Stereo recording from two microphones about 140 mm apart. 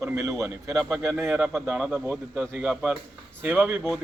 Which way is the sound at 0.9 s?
Centre (ahead or behind).